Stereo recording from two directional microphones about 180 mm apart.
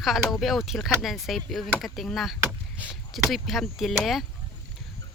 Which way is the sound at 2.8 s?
10° left (ahead or behind).